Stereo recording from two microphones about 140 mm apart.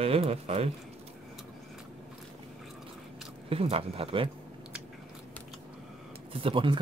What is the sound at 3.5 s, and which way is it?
Speech, 45° right (ahead or behind).